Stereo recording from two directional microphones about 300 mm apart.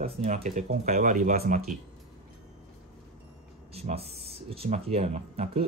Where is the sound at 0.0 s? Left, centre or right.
Right.